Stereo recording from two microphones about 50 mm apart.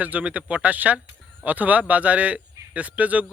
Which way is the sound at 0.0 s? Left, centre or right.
Right.